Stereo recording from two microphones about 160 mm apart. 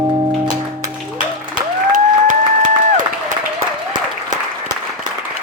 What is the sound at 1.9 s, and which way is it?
Applause, 55° right (ahead or behind).